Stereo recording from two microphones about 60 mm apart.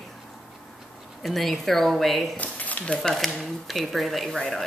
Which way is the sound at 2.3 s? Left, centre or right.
Left.